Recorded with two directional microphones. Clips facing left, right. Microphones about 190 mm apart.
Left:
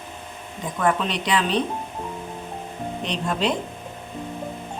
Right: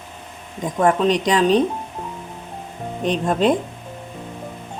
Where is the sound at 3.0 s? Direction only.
50° right (ahead or behind).